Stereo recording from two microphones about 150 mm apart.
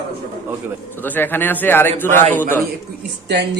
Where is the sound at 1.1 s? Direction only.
15° left (ahead or behind).